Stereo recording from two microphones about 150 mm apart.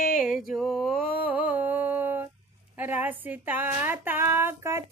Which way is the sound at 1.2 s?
10° right (ahead or behind).